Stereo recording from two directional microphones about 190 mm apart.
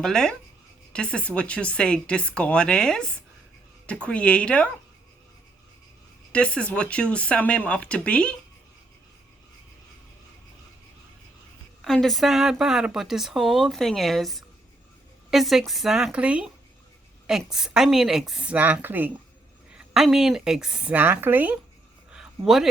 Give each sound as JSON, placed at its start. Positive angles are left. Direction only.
{"t": 0.0, "sound": "speech", "side_deg": 5}
{"t": 6.3, "sound": "speech", "side_deg": 5}
{"t": 11.8, "sound": "speech", "side_deg": 0}
{"t": 22.1, "sound": "a sound", "side_deg": -5}